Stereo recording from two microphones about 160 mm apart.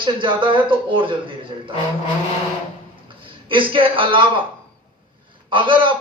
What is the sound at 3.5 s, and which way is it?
Speech, 30° right (ahead or behind).